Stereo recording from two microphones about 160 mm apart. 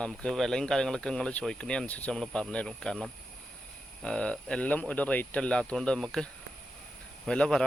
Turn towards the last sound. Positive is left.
turn(degrees=5)  # may be behind; listen again after turning